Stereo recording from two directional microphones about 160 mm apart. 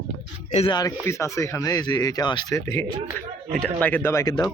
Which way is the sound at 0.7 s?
25° left (ahead or behind).